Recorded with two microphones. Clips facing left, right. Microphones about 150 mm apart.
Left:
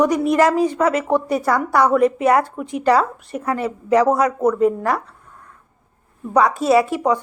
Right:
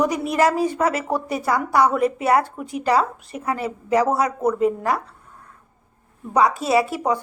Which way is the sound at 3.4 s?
Centre (ahead or behind).